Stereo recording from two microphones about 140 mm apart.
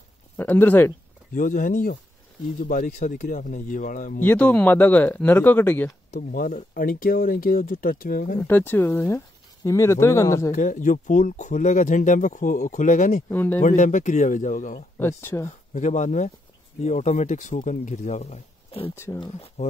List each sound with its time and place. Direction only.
0.4 s speech: 15° left (ahead or behind)
1.3 s speech: 70° left (ahead or behind)
4.2 s speech: 10° left (ahead or behind)
6.3 s speech: 80° left
8.4 s speech: 15° left (ahead or behind)
10.5 s speech: 65° left (ahead or behind)
13.3 s speech: 15° left (ahead or behind)
13.6 s speech: 60° left (ahead or behind)
15.0 s speech: 15° left (ahead or behind)
15.7 s speech: 60° left (ahead or behind)
19.1 s speech: 15° left (ahead or behind)
19.4 s speech: 50° left (ahead or behind)